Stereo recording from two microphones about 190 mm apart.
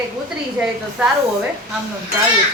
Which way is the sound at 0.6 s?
10° right (ahead or behind).